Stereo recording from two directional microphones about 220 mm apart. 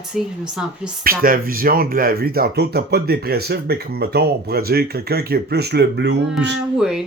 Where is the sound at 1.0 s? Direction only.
40° right (ahead or behind).